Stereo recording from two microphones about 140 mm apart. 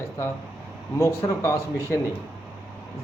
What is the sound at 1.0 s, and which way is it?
Speech, 20° left (ahead or behind).